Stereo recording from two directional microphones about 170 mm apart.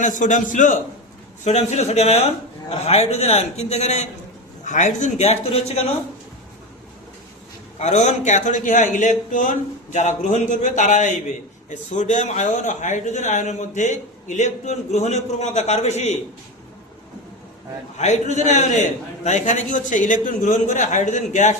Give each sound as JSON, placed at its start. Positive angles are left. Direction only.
{"t": 0.0, "sound": "a man's voice", "side_deg": 50}
{"t": 7.8, "sound": "speech", "side_deg": 40}
{"t": 17.9, "sound": "speech", "side_deg": 45}